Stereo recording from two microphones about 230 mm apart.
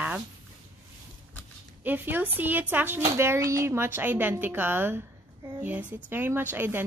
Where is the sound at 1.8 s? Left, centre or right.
Centre.